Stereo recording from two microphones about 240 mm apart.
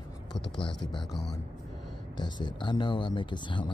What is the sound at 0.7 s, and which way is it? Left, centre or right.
Speech, centre.